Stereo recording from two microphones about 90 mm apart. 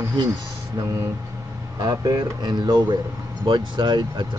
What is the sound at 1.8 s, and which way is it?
Speech, 45° right (ahead or behind).